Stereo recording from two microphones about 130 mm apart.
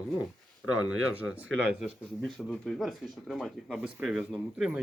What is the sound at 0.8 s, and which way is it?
Speech, 10° right (ahead or behind).